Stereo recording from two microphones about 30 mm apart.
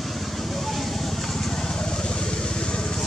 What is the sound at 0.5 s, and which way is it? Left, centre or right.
Vehicle, centre.